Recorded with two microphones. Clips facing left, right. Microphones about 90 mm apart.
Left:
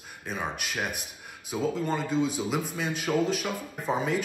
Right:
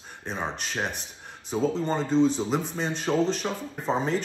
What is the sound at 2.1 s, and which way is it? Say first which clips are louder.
Speech: right 7 dB; 10° left (ahead or behind).